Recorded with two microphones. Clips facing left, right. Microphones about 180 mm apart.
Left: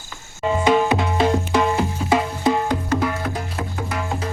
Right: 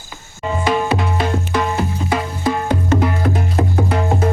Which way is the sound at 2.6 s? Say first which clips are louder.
Right 4 dB; 25° right (ahead or behind).